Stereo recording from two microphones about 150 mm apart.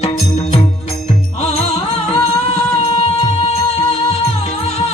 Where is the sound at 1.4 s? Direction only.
45° left (ahead or behind).